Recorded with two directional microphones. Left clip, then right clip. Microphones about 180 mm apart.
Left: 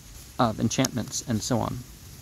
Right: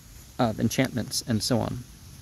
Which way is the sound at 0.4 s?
25° right (ahead or behind).